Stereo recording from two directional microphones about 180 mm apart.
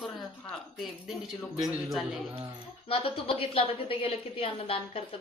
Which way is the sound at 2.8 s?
30° left (ahead or behind).